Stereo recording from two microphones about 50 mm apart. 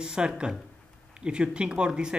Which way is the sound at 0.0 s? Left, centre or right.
Centre.